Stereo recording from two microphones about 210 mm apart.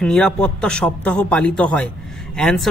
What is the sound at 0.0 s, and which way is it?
Speech, 5° left (ahead or behind).